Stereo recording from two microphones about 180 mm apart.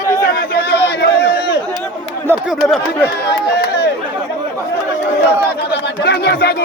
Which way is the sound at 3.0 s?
65° left (ahead or behind).